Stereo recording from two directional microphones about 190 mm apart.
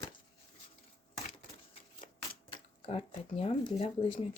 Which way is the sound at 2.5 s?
30° left (ahead or behind).